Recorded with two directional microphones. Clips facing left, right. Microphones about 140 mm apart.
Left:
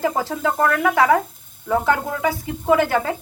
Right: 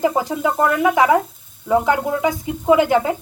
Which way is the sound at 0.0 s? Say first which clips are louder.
Right 3 dB; 15° right (ahead or behind).